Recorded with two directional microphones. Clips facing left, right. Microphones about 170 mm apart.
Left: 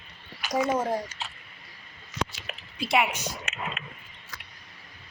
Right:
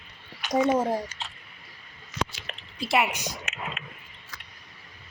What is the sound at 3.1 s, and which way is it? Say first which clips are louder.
Speech: even; 15° right (ahead or behind).